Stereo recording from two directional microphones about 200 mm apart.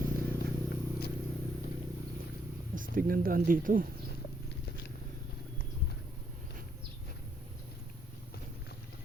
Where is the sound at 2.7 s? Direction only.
45° right (ahead or behind).